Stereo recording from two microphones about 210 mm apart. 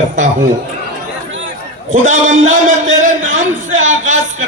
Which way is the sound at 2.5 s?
35° right (ahead or behind).